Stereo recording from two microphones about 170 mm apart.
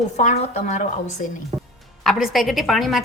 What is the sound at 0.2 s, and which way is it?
A woman's voice, 45° left (ahead or behind).